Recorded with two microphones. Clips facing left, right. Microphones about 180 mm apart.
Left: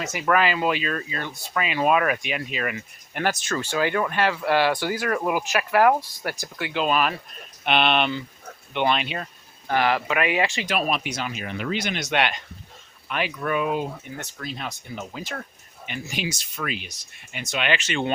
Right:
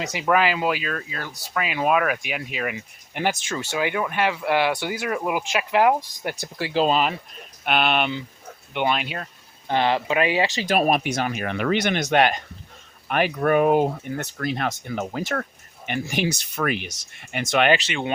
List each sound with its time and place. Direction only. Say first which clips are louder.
0.0 s speech: right 1 dB; 15° right (ahead or behind)
6.4 s speech: right 5 dB; 35° right (ahead or behind)
7.6 s speech: even; 5° right (ahead or behind)
9.6 s speech: right 1 dB; 25° right (ahead or behind)
10.7 s speech: right 5 dB; 50° right (ahead or behind)
12.1 s speech: right 5 dB; 40° right (ahead or behind)
17.3 s speech: right 7 dB; 90° right
17.6 s speech: right 6 dB; 40° right (ahead or behind)